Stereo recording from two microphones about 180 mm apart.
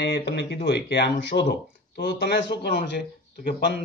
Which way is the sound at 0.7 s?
65° left (ahead or behind).